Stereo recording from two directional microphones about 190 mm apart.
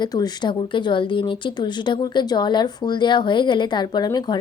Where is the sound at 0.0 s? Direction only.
20° left (ahead or behind).